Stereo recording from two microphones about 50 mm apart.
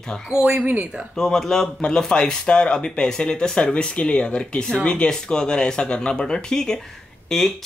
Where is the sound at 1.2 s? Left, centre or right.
Centre.